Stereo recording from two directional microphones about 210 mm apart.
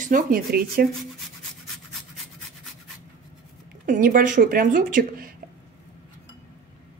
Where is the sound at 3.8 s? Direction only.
40° right (ahead or behind).